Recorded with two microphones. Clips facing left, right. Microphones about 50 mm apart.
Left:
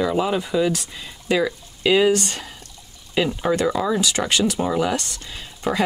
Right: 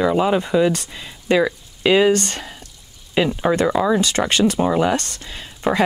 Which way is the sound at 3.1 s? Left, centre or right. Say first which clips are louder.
Right 3 dB; centre.